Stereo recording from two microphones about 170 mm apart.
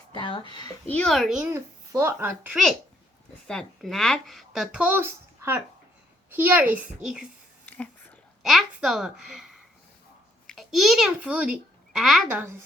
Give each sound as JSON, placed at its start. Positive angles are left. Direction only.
{"t": 0.1, "sound": "speech", "side_deg": 30}
{"t": 0.9, "sound": "speech", "side_deg": 5}
{"t": 1.5, "sound": "a child's voice", "side_deg": -15}
{"t": 3.4, "sound": "a child's voice", "side_deg": 5}
{"t": 8.4, "sound": "a child's voice", "side_deg": 0}